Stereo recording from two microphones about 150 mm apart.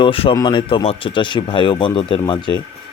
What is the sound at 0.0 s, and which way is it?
Speech, 35° left (ahead or behind).